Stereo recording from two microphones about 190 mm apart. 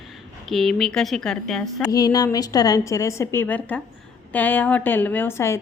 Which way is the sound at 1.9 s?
20° left (ahead or behind).